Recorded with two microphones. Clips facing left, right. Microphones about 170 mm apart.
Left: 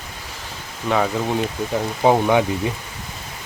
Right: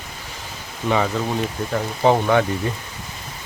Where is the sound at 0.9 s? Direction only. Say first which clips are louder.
Even; centre (ahead or behind).